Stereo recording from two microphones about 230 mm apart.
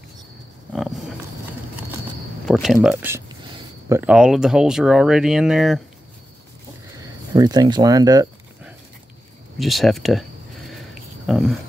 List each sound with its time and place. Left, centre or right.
2.4 s speech: centre
3.4 s a sound: right
4.0 s speech: centre
7.0 s speech: centre
9.6 s speech: centre
11.2 s speech: centre